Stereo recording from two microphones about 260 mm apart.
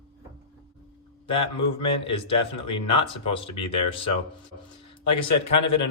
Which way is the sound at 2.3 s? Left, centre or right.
Left.